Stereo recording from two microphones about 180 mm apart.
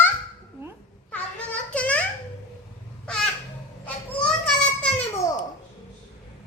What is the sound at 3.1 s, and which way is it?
Crow, 5° left (ahead or behind).